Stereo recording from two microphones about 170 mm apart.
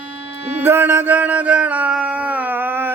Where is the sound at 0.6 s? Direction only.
10° right (ahead or behind).